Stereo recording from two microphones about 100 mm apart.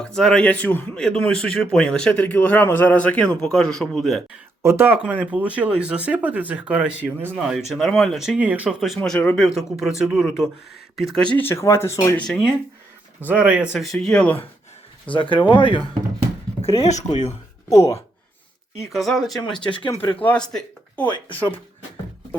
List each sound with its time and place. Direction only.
0.0 s speech: 5° left (ahead or behind)
4.6 s speech: 25° right (ahead or behind); by 8.4 s centre (ahead or behind)
8.4 s speech: 15° right (ahead or behind)
9.0 s speech: 10° left (ahead or behind)
9.6 s speech: 5° right (ahead or behind)
11.3 s speech: 25° left (ahead or behind)
13.2 s speech: 15° right (ahead or behind)
13.7 s speech: centre (ahead or behind)
15.1 s speech: 55° left (ahead or behind)
16.7 s speech: 90° left
17.7 s speech: 30° left (ahead or behind)
18.9 s speech: centre (ahead or behind)